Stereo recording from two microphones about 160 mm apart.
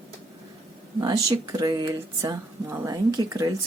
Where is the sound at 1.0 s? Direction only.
25° right (ahead or behind).